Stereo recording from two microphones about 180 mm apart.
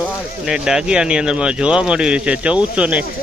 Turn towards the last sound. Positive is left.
turn(degrees=-5)  # may be behind; listen again after turning